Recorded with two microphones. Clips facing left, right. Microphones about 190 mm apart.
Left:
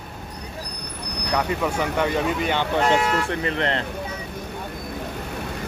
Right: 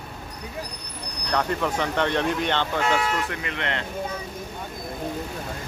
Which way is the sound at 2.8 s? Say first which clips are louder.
Left 4 dB; 25° left (ahead or behind).